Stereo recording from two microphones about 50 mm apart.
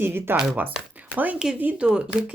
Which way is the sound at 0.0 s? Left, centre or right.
Right.